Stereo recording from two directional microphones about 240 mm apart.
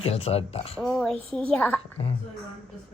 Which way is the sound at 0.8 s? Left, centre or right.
Centre.